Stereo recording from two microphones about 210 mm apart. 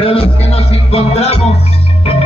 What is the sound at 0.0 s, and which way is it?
Music, 25° left (ahead or behind).